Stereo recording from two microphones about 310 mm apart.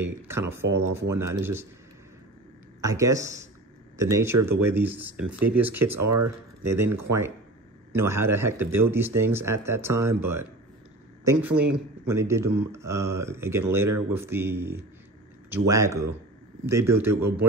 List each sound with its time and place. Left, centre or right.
0.3 s speech: centre
2.8 s speech: centre
5.9 s speech: right
6.6 s speech: centre